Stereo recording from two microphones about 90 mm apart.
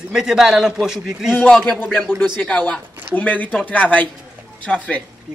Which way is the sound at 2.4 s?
15° left (ahead or behind).